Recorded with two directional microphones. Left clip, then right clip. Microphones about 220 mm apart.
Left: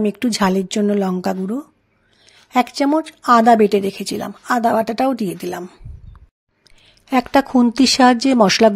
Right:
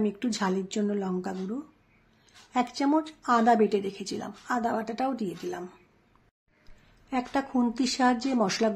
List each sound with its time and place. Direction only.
0.0 s speech: 40° left (ahead or behind)
7.1 s speech: 40° left (ahead or behind)